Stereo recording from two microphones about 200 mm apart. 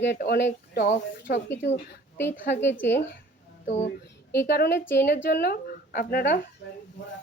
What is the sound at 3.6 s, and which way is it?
Speech, 35° left (ahead or behind).